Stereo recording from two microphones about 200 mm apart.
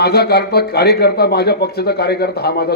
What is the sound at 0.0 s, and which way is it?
Speech, 55° left (ahead or behind).